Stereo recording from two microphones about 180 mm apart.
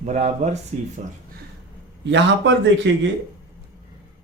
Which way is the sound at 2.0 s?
85° right.